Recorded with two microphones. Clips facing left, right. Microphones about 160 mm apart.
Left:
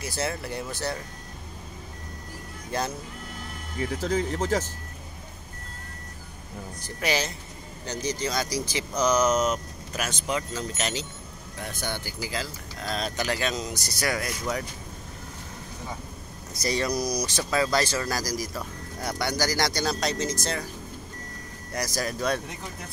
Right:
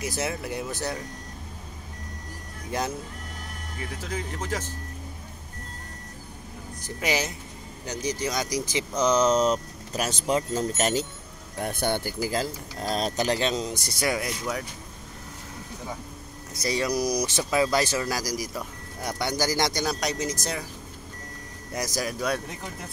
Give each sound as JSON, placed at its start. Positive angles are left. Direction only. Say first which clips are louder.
{"t": 0.0, "sound": "speech", "louder": "right 1 dB", "side_deg": -15}
{"t": 4.0, "sound": "speech", "louder": "left 7 dB", "side_deg": 30}
{"t": 6.8, "sound": "speech", "louder": "even", "side_deg": -15}
{"t": 16.6, "sound": "speech", "louder": "right 1 dB", "side_deg": -10}
{"t": 21.7, "sound": "speech", "louder": "even", "side_deg": -15}